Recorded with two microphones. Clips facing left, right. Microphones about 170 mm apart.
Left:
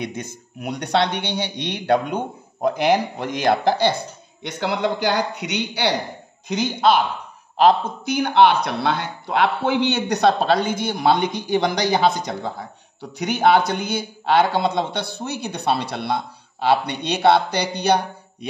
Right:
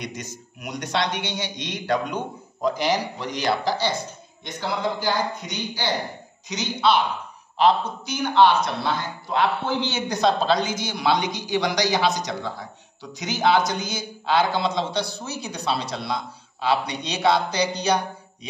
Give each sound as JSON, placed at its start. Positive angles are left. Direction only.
{"t": 0.0, "sound": "a man's voice", "side_deg": 55}
{"t": 6.5, "sound": "a man's voice", "side_deg": 50}